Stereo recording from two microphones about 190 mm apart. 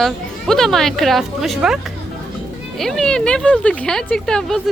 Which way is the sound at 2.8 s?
5° left (ahead or behind).